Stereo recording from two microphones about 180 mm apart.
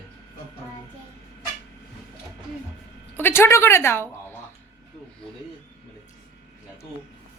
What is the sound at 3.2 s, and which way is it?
Speech, 15° left (ahead or behind).